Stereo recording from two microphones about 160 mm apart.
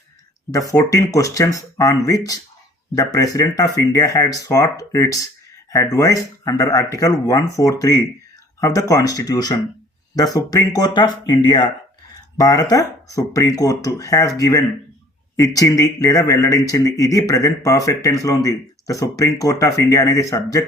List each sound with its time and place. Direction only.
0.9 s speech: 20° left (ahead or behind)